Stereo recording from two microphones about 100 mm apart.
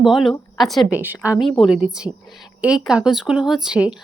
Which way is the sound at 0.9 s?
15° right (ahead or behind).